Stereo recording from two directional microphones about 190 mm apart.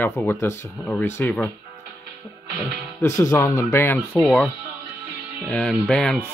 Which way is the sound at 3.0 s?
15° left (ahead or behind).